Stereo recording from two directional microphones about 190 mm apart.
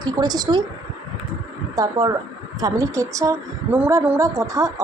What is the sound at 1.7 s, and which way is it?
A woman's voice, 20° right (ahead or behind).